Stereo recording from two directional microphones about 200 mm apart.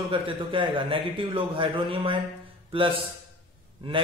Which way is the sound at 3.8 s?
25° right (ahead or behind).